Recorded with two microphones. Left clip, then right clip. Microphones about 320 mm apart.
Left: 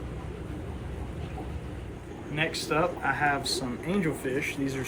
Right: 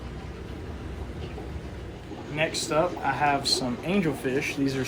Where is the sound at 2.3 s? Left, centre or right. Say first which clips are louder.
Right 3 dB; centre.